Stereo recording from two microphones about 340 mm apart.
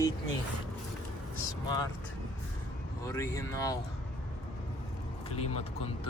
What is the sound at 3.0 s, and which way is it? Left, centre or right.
Speech, centre.